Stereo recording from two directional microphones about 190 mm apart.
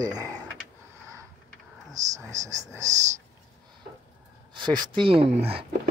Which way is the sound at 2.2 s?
15° right (ahead or behind).